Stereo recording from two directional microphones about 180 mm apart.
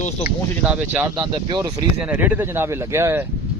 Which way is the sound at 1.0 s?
20° right (ahead or behind).